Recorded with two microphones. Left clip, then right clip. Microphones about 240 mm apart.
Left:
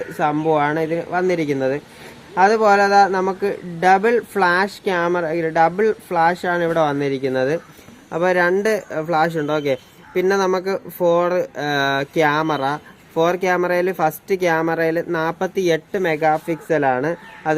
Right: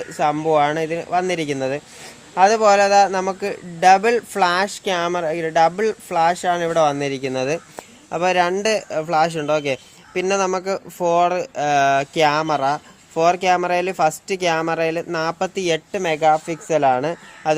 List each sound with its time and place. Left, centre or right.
0.2 s speech: right